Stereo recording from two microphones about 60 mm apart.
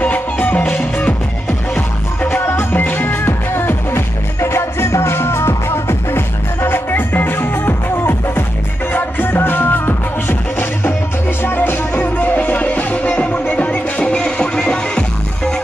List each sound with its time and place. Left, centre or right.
0.0 s music: left
11.9 s music: left